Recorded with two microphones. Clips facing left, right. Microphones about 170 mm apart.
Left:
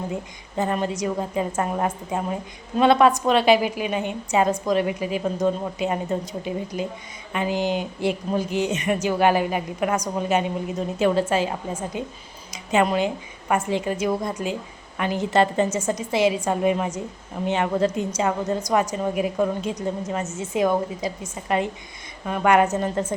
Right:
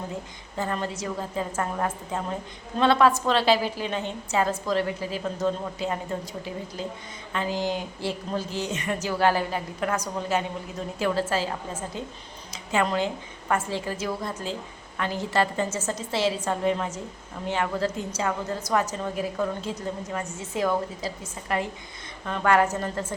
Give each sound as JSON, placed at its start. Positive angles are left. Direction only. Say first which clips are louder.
{"t": 0.5, "sound": "a woman's voice", "louder": "left 5 dB", "side_deg": 20}